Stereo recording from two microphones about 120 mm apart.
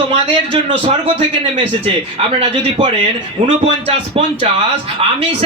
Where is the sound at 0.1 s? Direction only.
55° right (ahead or behind).